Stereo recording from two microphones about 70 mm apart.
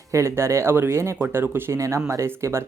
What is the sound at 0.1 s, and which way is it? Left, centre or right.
Speech, right.